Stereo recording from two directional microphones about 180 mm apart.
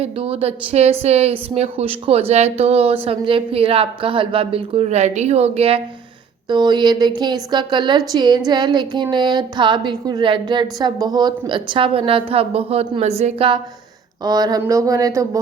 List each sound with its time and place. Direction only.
0.0 s a woman's voice: 30° right (ahead or behind)
14.3 s a woman's voice: 20° right (ahead or behind)